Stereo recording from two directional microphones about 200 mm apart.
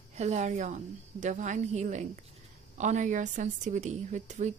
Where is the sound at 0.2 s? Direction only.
35° right (ahead or behind).